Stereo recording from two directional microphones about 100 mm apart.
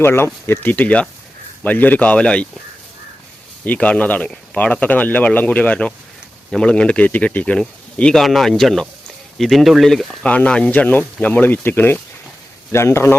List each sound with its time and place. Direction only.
0.0 s speech: 25° left (ahead or behind)
3.6 s speech: 15° left (ahead or behind)
10.2 s speech: 15° left (ahead or behind)